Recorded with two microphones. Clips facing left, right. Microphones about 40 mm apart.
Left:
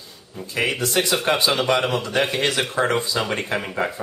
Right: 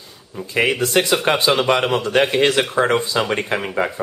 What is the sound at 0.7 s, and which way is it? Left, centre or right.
Speech, right.